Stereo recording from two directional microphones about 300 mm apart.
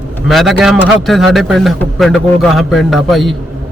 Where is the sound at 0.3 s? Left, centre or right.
Centre.